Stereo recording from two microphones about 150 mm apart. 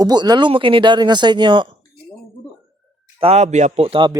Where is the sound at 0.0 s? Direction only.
25° right (ahead or behind).